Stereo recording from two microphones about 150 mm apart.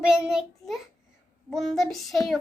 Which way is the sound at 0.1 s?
5° right (ahead or behind).